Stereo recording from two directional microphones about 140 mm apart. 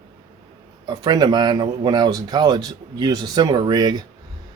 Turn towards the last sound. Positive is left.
turn(degrees=-30)  # may be behind; listen again after turning